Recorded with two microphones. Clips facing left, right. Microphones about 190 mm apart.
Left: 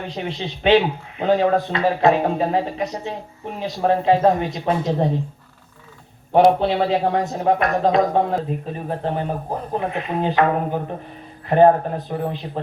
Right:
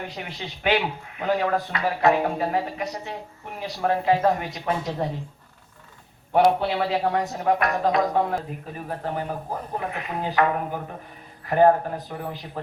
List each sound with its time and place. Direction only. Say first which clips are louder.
0.0 s a man's voice: left 7 dB; 25° left (ahead or behind)
6.3 s a man's voice: left 5 dB; 25° left (ahead or behind)